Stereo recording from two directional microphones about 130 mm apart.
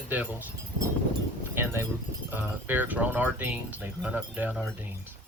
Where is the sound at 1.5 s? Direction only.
15° right (ahead or behind).